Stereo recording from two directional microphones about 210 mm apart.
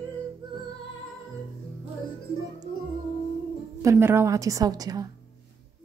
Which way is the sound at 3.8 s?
10° right (ahead or behind).